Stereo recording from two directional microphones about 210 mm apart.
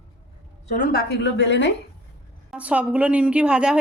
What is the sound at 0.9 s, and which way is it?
Speech, 55° left (ahead or behind).